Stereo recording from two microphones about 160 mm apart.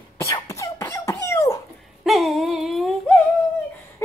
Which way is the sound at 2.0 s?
Centre (ahead or behind).